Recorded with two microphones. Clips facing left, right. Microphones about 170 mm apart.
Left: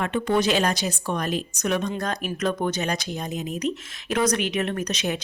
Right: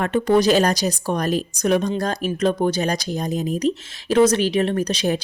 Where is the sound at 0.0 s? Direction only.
40° right (ahead or behind).